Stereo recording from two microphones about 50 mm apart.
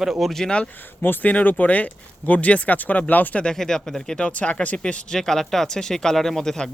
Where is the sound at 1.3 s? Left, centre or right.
Left.